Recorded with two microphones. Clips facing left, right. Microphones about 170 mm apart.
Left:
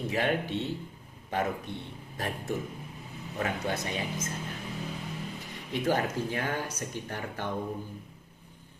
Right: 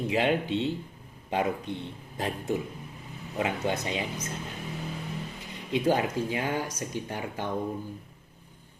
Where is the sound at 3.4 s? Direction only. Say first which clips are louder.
Right 3 dB; 20° right (ahead or behind).